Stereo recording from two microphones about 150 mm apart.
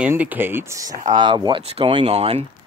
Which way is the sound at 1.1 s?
30° right (ahead or behind).